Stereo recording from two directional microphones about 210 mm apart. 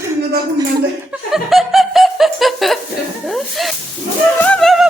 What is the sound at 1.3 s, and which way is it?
Snicker, centre (ahead or behind).